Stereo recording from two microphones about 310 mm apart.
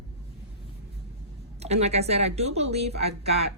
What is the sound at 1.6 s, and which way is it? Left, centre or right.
Speech, centre.